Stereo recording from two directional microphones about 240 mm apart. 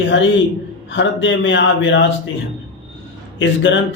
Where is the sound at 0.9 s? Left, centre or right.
Left.